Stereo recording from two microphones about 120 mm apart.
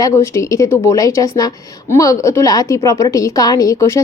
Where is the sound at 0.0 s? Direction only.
20° left (ahead or behind).